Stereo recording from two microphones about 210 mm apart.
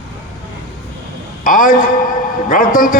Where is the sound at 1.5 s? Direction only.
40° left (ahead or behind).